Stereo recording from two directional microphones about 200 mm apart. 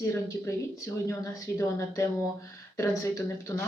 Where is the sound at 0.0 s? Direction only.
15° left (ahead or behind).